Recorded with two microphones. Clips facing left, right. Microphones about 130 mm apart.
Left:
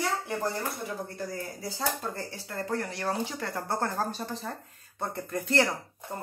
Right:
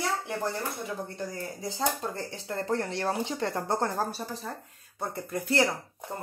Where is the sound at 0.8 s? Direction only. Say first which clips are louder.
Even; 20° right (ahead or behind).